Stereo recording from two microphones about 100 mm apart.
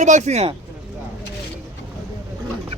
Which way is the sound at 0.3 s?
90° right.